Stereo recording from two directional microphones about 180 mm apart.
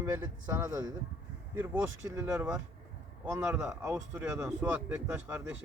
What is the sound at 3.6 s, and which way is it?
Speech, 15° right (ahead or behind).